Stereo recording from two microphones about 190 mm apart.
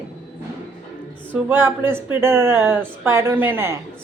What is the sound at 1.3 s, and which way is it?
Speech, 10° right (ahead or behind).